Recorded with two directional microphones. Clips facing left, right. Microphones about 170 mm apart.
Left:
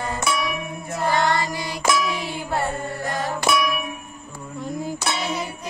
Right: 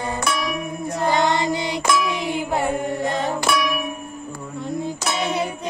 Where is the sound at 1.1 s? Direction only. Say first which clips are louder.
Right 2 dB; 20° right (ahead or behind).